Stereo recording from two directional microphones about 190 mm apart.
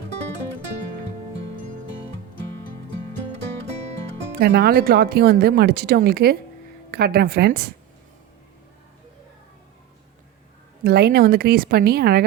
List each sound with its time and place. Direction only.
4.4 s speech: 60° right (ahead or behind)
10.8 s speech: 55° right (ahead or behind)